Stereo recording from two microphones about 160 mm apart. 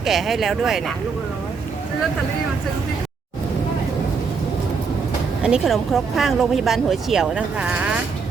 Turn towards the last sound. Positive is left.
turn(degrees=-5)  # may be behind; listen again after turning